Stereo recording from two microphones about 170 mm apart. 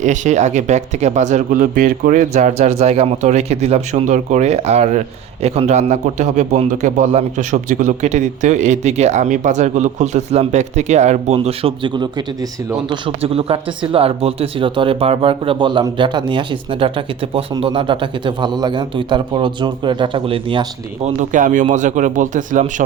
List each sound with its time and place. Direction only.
0.0 s speech: 45° right (ahead or behind)
11.3 s speech: 30° right (ahead or behind)
21.2 s speech: 50° right (ahead or behind)